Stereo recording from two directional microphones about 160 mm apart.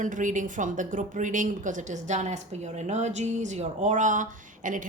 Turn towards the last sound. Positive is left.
turn(degrees=-55)  # may be behind; listen again after turning